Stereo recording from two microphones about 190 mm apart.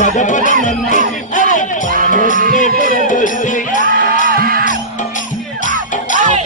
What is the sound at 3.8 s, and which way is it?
Music, 45° right (ahead or behind).